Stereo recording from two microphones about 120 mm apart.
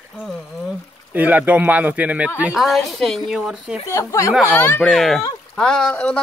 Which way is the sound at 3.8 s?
25° left (ahead or behind).